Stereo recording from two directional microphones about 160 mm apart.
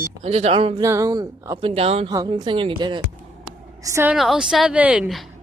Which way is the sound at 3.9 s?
15° right (ahead or behind).